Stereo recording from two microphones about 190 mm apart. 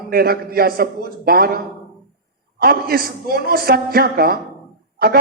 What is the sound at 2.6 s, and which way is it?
A woman's voice, 50° right (ahead or behind).